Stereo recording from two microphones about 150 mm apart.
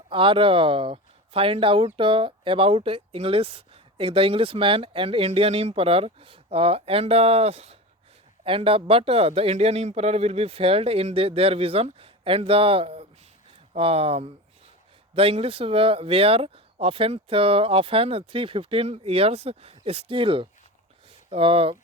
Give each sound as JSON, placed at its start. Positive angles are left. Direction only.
{"t": 0.1, "sound": "speech", "side_deg": -35}